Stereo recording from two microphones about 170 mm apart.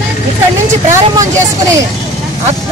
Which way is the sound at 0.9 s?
20° right (ahead or behind).